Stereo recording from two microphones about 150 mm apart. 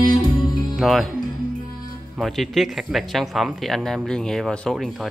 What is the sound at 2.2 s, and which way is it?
Speech, centre (ahead or behind).